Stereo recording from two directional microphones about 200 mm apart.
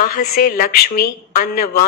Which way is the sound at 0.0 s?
45° left (ahead or behind).